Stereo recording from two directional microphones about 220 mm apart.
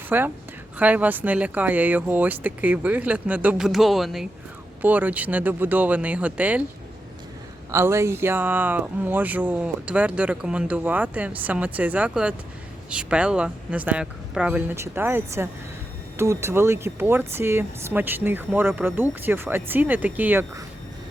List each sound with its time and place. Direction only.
0.1 s speech: 10° right (ahead or behind)
7.7 s speech: 10° right (ahead or behind)